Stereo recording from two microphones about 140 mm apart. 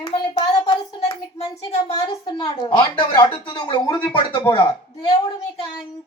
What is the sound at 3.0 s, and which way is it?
Speech, 35° left (ahead or behind).